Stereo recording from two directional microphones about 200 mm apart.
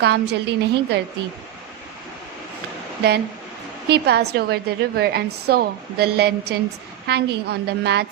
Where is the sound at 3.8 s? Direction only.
55° right (ahead or behind).